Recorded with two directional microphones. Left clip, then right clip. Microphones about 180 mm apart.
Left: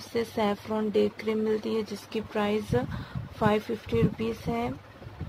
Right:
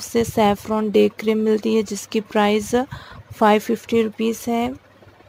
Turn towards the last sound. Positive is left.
turn(degrees=-50)  # may be behind; listen again after turning